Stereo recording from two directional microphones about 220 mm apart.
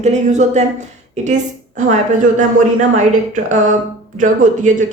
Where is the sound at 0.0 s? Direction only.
30° right (ahead or behind).